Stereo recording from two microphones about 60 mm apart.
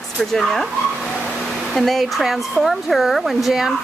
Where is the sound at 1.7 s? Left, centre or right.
Centre.